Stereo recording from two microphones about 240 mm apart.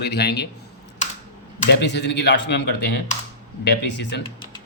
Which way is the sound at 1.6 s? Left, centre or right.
Left.